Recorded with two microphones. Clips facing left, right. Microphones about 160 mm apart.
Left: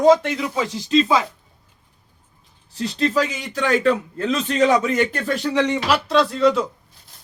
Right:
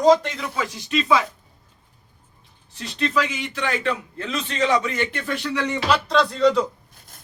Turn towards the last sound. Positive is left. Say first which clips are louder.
# left 1 dB
turn(degrees=5)  # may be behind; listen again after turning